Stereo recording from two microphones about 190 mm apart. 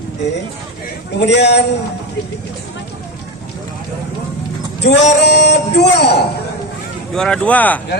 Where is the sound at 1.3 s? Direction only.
65° left (ahead or behind).